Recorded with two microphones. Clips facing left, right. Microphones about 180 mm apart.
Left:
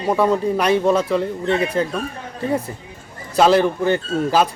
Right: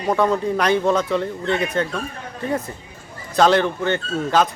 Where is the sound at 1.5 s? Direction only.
30° left (ahead or behind).